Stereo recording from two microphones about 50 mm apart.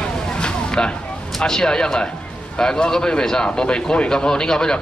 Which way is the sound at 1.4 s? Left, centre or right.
Centre.